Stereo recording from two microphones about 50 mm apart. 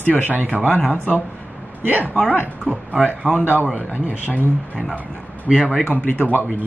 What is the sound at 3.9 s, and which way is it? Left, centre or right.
Speech, right.